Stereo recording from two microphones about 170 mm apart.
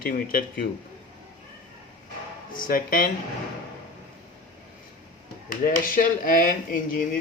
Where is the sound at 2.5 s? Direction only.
55° left (ahead or behind).